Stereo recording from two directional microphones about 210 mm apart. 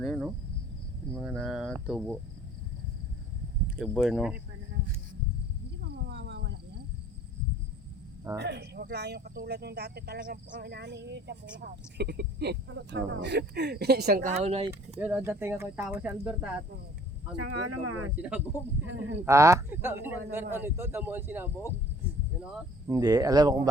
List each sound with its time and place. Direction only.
0.0 s speech: centre (ahead or behind)
3.8 s speech: centre (ahead or behind)
5.8 s a sound: 55° right (ahead or behind)
8.4 s speech: 55° right (ahead or behind); by 14.7 s 30° right (ahead or behind)
14.9 s a man's voice: 5° right (ahead or behind)
17.3 s speech: 90° right
18.2 s a man's voice: 5° right (ahead or behind)
18.9 s speech: 65° right (ahead or behind)
19.2 s a man's voice: 15° right (ahead or behind)
22.9 s a man's voice: 15° right (ahead or behind)